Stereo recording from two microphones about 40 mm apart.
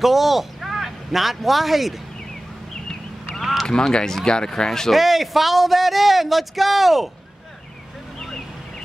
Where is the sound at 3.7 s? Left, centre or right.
Centre.